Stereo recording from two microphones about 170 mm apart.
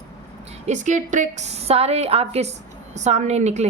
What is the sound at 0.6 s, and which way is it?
A woman's voice, 45° right (ahead or behind).